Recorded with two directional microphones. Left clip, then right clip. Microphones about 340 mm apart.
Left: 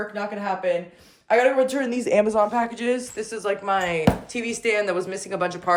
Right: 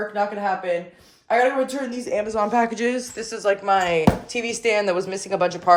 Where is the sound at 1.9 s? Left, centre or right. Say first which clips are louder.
Left 5 dB; left.